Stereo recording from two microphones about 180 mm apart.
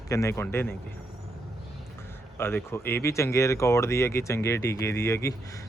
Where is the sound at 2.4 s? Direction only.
10° left (ahead or behind).